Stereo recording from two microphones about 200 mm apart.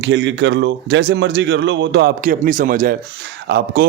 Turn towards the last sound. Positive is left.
turn(degrees=-55)  # may be behind; listen again after turning